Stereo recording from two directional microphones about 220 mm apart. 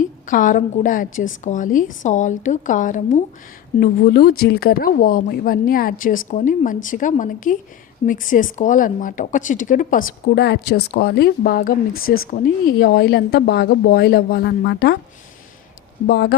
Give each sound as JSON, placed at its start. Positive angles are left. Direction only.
{"t": 0.0, "sound": "a woman's voice", "side_deg": 35}
{"t": 3.8, "sound": "a woman's voice", "side_deg": 45}
{"t": 11.9, "sound": "speech", "side_deg": 70}
{"t": 12.3, "sound": "speech", "side_deg": 45}
{"t": 16.0, "sound": "speech", "side_deg": 50}